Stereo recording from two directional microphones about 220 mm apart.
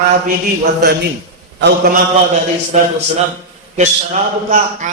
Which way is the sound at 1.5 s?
50° right (ahead or behind).